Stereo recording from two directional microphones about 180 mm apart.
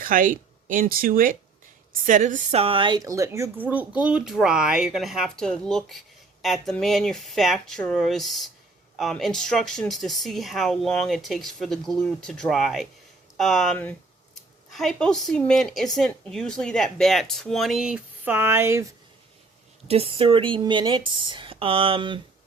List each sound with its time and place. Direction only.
0.0 s a woman's voice: 50° right (ahead or behind); by 18.9 s 15° right (ahead or behind)
19.9 s speech: 30° right (ahead or behind)